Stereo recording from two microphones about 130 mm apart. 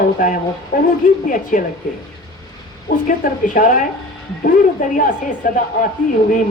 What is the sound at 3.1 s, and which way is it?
A woman's voice, 90° left.